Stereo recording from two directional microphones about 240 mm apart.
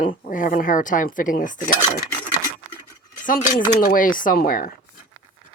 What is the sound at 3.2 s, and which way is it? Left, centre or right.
A woman's voice, left.